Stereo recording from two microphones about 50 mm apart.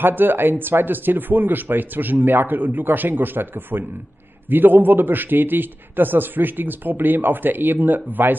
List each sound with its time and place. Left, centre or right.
0.0 s a man's voice: right